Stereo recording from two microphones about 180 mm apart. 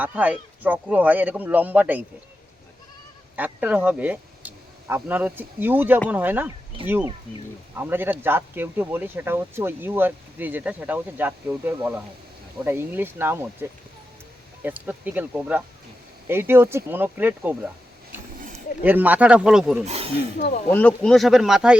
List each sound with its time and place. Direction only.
0.0 s speech: 10° right (ahead or behind)
3.3 s speech: 10° right (ahead or behind)
18.3 s a sound: 50° right (ahead or behind)
18.8 s speech: 10° right (ahead or behind)
19.8 s speech: 35° right (ahead or behind)
20.7 s speech: 5° left (ahead or behind)